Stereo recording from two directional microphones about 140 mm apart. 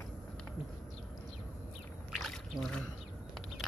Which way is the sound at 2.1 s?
Centre (ahead or behind).